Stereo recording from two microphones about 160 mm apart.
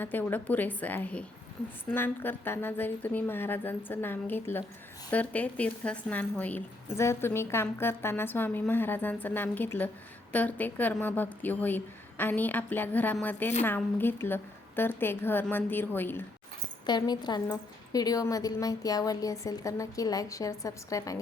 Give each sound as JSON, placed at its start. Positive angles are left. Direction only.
{"t": 0.0, "sound": "a woman's voice", "side_deg": 10}
{"t": 16.8, "sound": "a woman's voice", "side_deg": 25}